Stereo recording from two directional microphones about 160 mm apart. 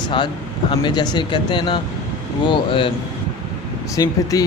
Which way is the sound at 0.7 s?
30° left (ahead or behind).